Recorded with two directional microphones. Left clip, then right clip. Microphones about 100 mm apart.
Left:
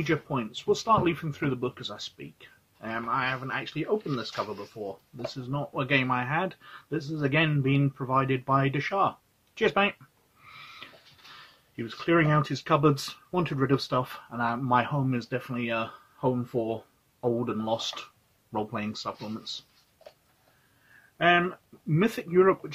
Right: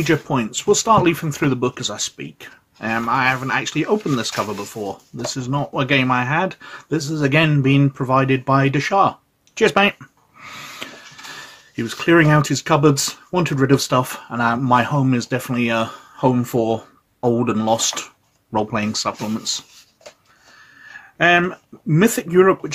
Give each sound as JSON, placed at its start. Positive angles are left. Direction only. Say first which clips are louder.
{"t": 0.0, "sound": "speech", "louder": "right 10 dB", "side_deg": -25}
{"t": 5.2, "sound": "speech", "louder": "right 11 dB", "side_deg": -40}
{"t": 5.7, "sound": "speech", "louder": "right 8 dB", "side_deg": -20}
{"t": 10.5, "sound": "snort", "louder": "right 12 dB", "side_deg": -35}
{"t": 11.7, "sound": "speech", "louder": "right 10 dB", "side_deg": -30}
{"t": 13.7, "sound": "speech", "louder": "right 10 dB", "side_deg": -30}
{"t": 18.5, "sound": "speech", "louder": "right 11 dB", "side_deg": -30}
{"t": 21.2, "sound": "speech", "louder": "right 8 dB", "side_deg": -30}